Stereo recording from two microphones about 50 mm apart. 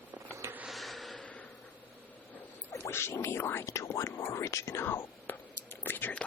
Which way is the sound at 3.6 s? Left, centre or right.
Left.